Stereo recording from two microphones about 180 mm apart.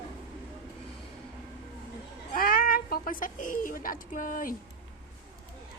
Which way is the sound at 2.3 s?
55° left (ahead or behind).